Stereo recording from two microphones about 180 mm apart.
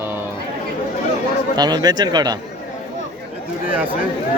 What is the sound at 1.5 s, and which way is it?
Speech, 20° right (ahead or behind).